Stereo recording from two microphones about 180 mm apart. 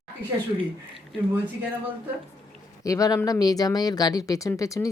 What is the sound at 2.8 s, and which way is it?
Speech, 20° left (ahead or behind).